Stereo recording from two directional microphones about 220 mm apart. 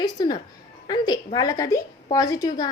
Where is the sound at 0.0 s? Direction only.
20° left (ahead or behind).